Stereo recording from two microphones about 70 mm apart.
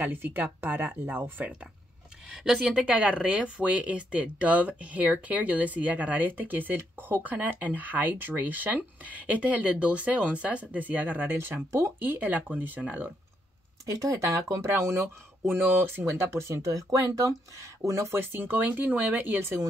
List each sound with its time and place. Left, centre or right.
0.0 s speech: right
2.3 s speech: centre
14.0 s speech: right
14.7 s speech: right
16.5 s speech: right
18.3 s speech: right